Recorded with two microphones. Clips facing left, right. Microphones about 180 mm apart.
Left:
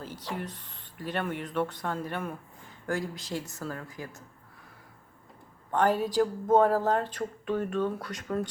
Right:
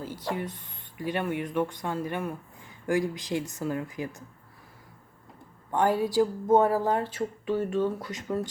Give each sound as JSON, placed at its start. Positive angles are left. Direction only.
{"t": 0.0, "sound": "speech", "side_deg": -10}
{"t": 5.7, "sound": "speech", "side_deg": -15}